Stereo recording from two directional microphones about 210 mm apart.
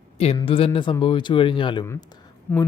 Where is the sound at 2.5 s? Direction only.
10° left (ahead or behind).